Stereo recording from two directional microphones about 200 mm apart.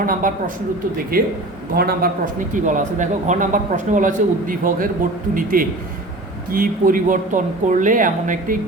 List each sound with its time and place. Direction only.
0.0 s a man's voice: 45° right (ahead or behind)